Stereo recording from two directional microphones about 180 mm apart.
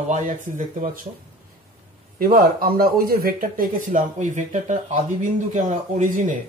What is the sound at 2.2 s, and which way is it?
A man's voice, 55° right (ahead or behind).